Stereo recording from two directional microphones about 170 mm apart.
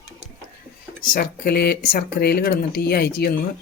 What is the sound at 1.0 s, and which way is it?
Speech, 60° left (ahead or behind).